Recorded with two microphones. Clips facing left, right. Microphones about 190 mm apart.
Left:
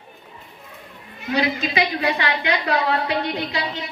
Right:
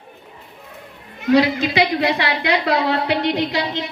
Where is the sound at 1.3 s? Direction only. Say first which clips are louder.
Right 6 dB; 80° right.